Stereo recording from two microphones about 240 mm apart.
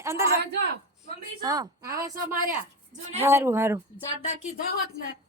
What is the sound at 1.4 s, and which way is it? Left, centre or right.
Speech, centre.